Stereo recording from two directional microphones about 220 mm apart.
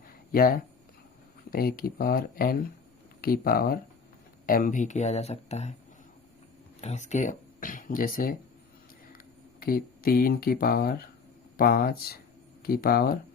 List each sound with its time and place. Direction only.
0.3 s speech: 40° left (ahead or behind)
6.8 s speech: 30° left (ahead or behind)